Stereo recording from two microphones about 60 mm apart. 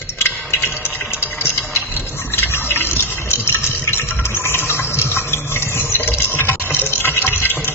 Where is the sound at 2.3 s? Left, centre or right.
Left.